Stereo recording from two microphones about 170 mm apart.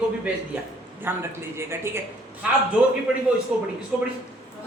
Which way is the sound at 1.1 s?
15° right (ahead or behind).